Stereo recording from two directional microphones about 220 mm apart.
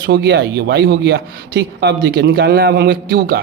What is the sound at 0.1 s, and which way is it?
Speech, 45° right (ahead or behind).